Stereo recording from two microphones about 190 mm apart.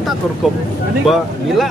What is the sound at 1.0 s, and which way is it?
Speech, centre (ahead or behind).